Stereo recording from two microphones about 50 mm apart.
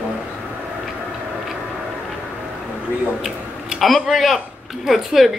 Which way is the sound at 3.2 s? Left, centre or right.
Centre.